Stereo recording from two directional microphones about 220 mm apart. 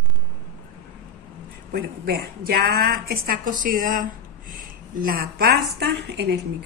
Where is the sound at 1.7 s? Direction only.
45° right (ahead or behind).